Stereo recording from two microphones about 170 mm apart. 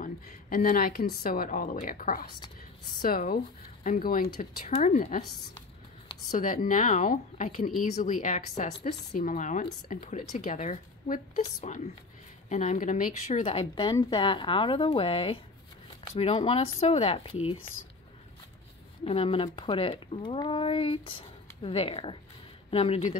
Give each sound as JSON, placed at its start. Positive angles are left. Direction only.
{"t": 0.0, "sound": "speech", "side_deg": 55}
{"t": 6.3, "sound": "speech", "side_deg": 50}
{"t": 13.4, "sound": "a woman's voice", "side_deg": 35}
{"t": 19.0, "sound": "speech", "side_deg": 35}